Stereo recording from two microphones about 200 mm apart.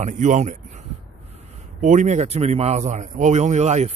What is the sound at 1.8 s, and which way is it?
Speech, 40° right (ahead or behind).